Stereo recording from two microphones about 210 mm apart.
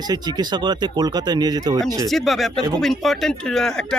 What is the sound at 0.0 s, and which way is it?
Speech, 20° right (ahead or behind).